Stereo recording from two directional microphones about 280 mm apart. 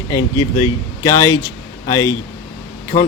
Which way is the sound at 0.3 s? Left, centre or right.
Left.